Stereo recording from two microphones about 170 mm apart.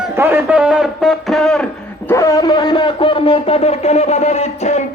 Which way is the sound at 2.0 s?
15° left (ahead or behind).